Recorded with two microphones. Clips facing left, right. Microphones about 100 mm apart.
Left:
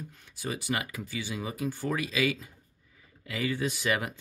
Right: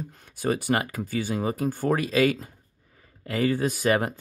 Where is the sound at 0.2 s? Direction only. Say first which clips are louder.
Right 10 dB; 50° right (ahead or behind).